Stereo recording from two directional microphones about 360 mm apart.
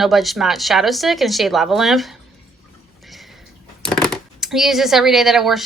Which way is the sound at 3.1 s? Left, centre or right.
Centre.